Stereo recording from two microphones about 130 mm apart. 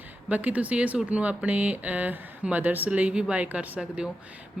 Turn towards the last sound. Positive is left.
turn(degrees=-10)  # may be behind; listen again after turning